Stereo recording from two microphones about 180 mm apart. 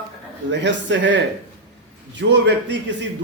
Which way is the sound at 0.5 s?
80° right.